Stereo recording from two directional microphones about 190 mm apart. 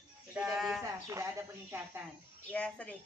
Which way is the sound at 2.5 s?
5° left (ahead or behind).